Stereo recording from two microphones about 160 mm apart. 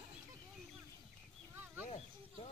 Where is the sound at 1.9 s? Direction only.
40° left (ahead or behind).